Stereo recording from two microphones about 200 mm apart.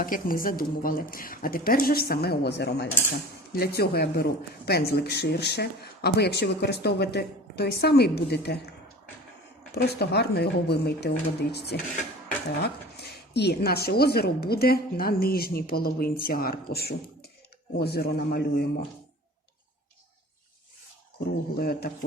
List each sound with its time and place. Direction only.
0.0 s speech: 45° left (ahead or behind)
9.7 s speech: 55° left (ahead or behind)
21.5 s speech: 50° left (ahead or behind)